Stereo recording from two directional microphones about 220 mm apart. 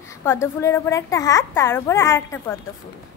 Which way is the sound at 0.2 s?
10° left (ahead or behind).